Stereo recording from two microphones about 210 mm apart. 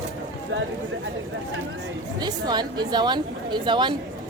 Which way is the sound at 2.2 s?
20° right (ahead or behind).